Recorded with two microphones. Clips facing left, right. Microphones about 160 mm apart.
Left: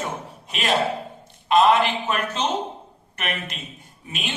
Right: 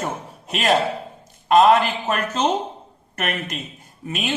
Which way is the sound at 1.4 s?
45° right (ahead or behind).